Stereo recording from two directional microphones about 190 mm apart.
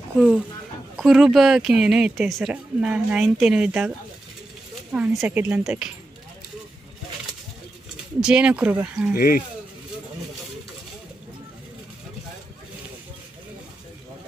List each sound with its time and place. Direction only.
0.1 s speech: centre (ahead or behind)
4.9 s speech: 5° right (ahead or behind)
7.9 s speech: 5° right (ahead or behind)
9.1 s speech: 50° left (ahead or behind)